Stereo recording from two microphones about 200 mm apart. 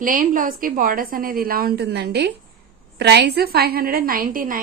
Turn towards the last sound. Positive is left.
turn(degrees=-45)  # may be behind; listen again after turning